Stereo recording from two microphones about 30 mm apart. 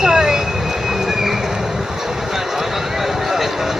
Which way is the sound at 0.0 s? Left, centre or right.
Right.